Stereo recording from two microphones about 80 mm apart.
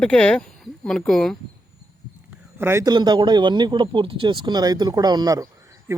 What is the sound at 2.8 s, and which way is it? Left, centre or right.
Speech, right.